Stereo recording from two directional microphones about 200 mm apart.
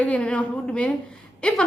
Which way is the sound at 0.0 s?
5° left (ahead or behind).